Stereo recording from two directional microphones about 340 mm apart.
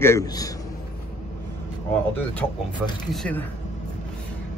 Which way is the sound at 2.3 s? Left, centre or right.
Centre.